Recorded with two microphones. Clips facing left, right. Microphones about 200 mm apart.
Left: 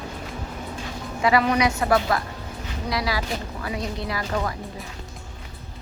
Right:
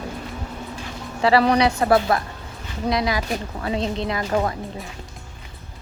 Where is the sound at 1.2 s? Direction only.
35° right (ahead or behind).